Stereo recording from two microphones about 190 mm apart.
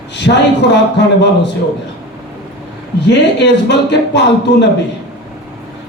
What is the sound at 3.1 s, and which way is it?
A man's voice, 65° left (ahead or behind).